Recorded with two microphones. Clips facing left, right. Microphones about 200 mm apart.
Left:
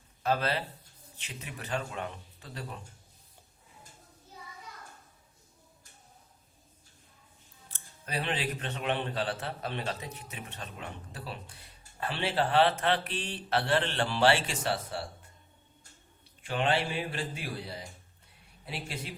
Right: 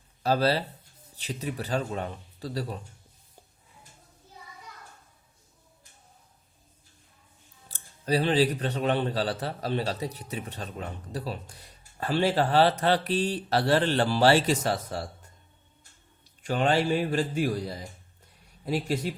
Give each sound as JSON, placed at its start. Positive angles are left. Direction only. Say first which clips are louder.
{"t": 0.2, "sound": "speech", "louder": "right 5 dB", "side_deg": -35}
{"t": 7.7, "sound": "speech", "louder": "right 11 dB", "side_deg": -35}
{"t": 16.4, "sound": "a man's voice", "louder": "right 5 dB", "side_deg": -40}